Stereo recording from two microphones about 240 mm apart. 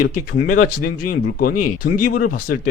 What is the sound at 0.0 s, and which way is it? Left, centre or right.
Speech, left.